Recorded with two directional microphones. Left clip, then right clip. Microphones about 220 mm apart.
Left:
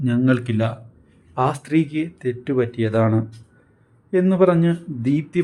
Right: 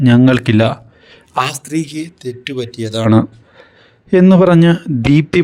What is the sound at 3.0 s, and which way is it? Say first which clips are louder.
A man's voice: right 12 dB; 45° right (ahead or behind).